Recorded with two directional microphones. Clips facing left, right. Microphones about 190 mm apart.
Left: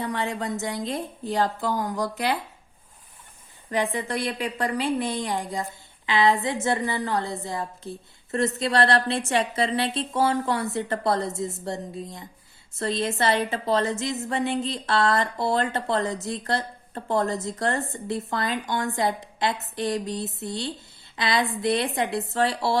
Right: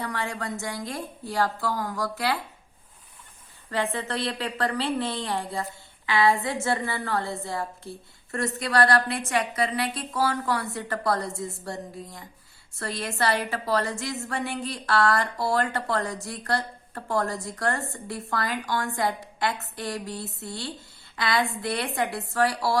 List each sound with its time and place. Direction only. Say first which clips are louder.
0.0 s a woman's voice: left 3 dB; 20° left (ahead or behind)
3.7 s a woman's voice: left 2 dB; 15° left (ahead or behind)